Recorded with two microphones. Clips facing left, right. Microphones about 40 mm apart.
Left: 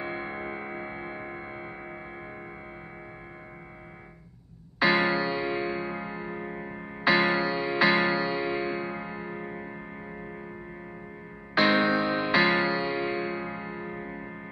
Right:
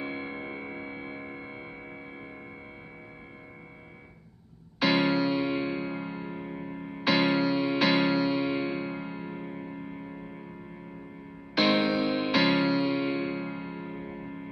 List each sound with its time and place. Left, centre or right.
0.0 s music: centre
4.8 s music: right
5.4 s music: centre
7.0 s music: centre
11.5 s music: right; by 14.5 s centre